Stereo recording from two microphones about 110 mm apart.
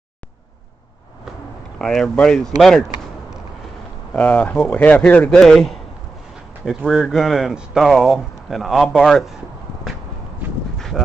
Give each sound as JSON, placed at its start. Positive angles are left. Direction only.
{"t": 1.8, "sound": "speech", "side_deg": 5}
{"t": 4.1, "sound": "speech", "side_deg": 15}